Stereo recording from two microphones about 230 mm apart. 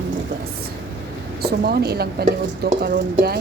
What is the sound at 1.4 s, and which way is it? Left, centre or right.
Speech, right.